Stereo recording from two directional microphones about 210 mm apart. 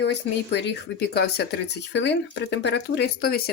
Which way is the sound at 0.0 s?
55° left (ahead or behind).